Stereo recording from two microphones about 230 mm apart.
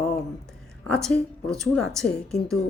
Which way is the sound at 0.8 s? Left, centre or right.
Centre.